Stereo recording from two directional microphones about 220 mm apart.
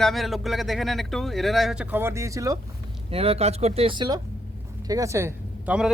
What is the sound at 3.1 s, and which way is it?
Speech, 25° right (ahead or behind).